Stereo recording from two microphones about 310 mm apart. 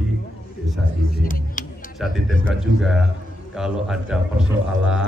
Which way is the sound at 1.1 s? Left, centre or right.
Left.